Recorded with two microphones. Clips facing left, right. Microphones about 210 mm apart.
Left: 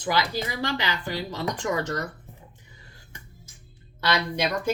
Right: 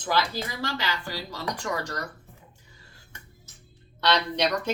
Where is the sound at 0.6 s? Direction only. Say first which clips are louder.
Left 3 dB; 20° left (ahead or behind).